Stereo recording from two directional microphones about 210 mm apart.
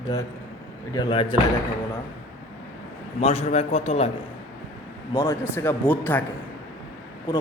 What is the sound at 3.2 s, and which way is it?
Speech, 30° left (ahead or behind).